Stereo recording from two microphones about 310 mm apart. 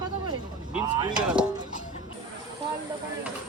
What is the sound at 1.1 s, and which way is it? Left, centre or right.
Speech, centre.